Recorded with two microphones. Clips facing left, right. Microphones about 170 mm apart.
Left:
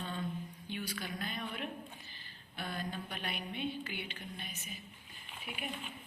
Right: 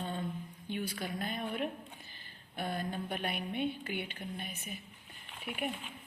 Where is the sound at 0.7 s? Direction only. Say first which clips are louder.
Right 4 dB; 50° right (ahead or behind).